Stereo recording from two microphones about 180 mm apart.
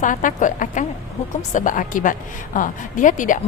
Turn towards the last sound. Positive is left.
turn(degrees=45)  # may be behind; listen again after turning